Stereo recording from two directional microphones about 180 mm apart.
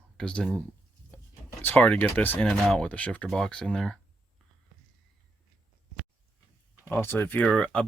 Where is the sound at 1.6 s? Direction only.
10° left (ahead or behind).